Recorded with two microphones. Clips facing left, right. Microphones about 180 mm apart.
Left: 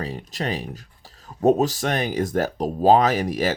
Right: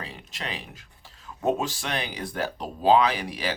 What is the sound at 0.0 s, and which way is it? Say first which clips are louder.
Speech: left 9 dB; 40° left (ahead or behind).